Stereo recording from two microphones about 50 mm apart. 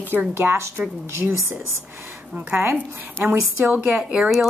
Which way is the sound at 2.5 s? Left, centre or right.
Right.